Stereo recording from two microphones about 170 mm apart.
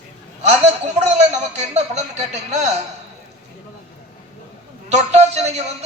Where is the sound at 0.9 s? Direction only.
40° right (ahead or behind).